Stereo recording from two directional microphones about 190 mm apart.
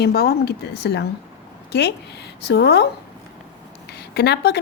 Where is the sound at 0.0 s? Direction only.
55° left (ahead or behind).